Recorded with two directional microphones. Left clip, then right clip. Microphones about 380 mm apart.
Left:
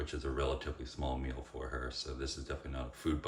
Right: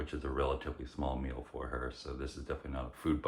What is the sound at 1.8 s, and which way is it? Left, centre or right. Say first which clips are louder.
Speech: left 2 dB; centre.